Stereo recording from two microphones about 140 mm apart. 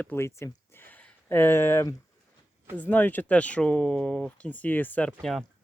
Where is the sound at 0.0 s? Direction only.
15° left (ahead or behind).